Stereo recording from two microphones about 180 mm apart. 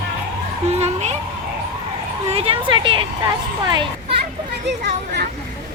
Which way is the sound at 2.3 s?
30° right (ahead or behind).